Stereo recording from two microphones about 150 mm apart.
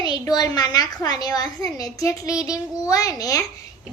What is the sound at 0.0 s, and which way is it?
A child's voice, 25° left (ahead or behind).